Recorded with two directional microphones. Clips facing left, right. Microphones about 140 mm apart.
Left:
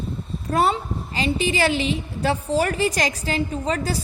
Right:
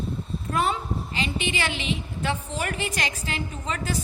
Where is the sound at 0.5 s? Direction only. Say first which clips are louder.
Left 5 dB; 35° left (ahead or behind).